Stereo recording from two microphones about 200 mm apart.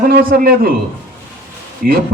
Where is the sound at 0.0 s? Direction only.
45° right (ahead or behind).